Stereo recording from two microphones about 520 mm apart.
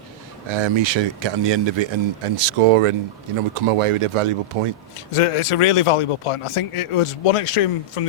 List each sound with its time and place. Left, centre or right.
0.4 s speech: right
5.1 s a man's voice: left